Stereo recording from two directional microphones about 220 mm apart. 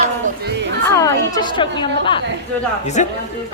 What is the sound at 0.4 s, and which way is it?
Music, 50° right (ahead or behind).